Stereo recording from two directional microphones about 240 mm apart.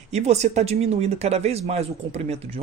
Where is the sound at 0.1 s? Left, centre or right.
Right.